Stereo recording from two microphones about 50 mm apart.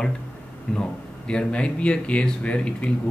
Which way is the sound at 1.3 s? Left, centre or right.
Left.